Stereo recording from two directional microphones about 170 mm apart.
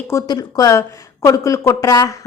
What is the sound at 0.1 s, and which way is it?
A woman's voice, 20° left (ahead or behind).